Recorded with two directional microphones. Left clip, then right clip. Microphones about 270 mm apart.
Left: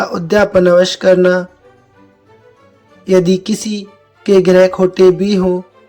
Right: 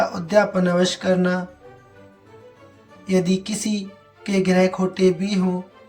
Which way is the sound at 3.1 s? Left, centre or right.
Centre.